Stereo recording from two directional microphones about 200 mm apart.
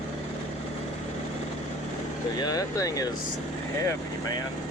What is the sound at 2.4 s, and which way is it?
Speech, 20° left (ahead or behind).